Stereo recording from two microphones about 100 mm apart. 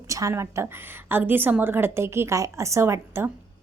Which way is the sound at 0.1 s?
30° right (ahead or behind).